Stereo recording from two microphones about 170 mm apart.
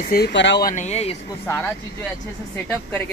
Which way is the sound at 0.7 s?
40° left (ahead or behind).